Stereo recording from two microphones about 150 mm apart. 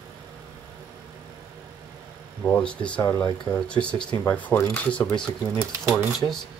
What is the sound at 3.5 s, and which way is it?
Speech, 5° left (ahead or behind).